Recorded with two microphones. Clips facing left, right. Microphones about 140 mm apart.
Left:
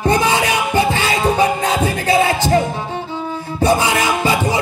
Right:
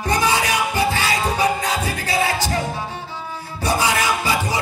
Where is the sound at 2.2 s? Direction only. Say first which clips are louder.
Left 6 dB; 20° left (ahead or behind).